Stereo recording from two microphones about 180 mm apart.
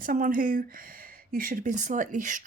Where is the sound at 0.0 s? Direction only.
50° right (ahead or behind).